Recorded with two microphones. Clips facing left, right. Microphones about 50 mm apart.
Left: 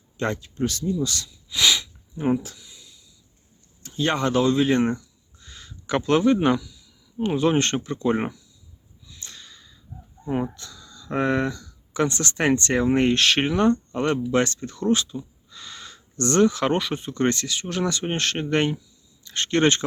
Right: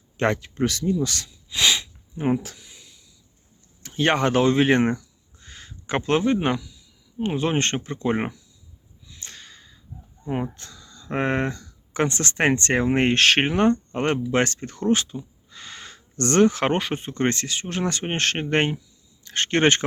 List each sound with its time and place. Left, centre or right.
0.3 s speech: right
1.0 s speech: right
1.5 s sniff: centre
2.1 s speech: right
2.4 s a sound: right
3.8 s speech: right
4.8 s a sound: right; by 6.9 s centre
7.2 s speech: right
9.2 s a sound: right
10.2 s speech: centre
10.6 s a sound: right
12.0 s speech: right